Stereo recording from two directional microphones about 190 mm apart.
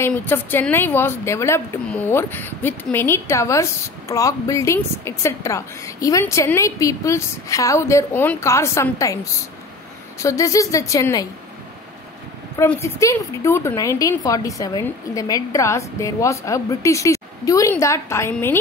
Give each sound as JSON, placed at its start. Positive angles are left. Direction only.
{"t": 0.0, "sound": "a woman's voice", "side_deg": 10}
{"t": 12.5, "sound": "a woman's voice", "side_deg": 15}